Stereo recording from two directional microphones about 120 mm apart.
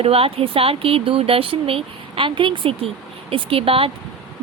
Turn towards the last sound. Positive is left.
turn(degrees=-50)  # may be behind; listen again after turning